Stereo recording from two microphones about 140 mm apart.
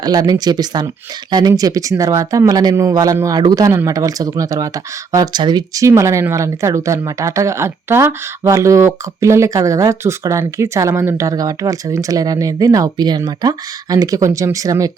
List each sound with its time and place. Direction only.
0.0 s speech: 30° right (ahead or behind)